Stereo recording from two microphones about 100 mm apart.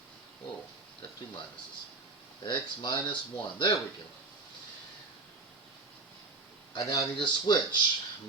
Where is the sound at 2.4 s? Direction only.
50° left (ahead or behind).